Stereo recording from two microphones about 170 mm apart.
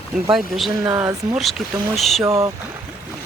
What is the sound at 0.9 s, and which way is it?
Speech, 20° right (ahead or behind).